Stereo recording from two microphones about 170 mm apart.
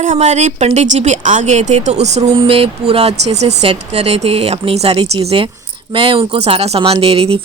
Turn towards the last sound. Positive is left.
turn(degrees=-35)  # may be behind; listen again after turning